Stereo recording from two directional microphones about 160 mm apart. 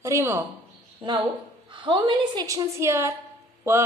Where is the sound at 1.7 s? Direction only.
30° right (ahead or behind).